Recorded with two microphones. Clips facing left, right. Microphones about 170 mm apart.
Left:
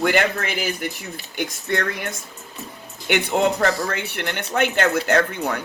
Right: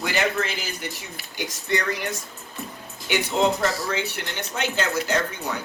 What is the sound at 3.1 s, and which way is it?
Speech, 60° left (ahead or behind).